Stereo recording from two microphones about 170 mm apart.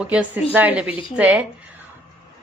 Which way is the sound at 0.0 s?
5° right (ahead or behind).